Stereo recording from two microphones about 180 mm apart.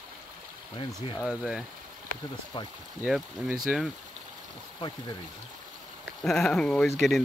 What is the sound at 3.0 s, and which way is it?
Speech, 5° right (ahead or behind).